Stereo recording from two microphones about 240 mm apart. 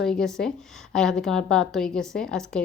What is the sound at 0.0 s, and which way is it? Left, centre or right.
A woman's voice, centre.